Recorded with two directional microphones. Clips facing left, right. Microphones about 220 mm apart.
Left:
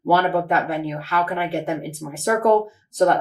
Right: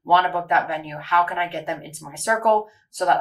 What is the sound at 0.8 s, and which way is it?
Speech, 40° left (ahead or behind).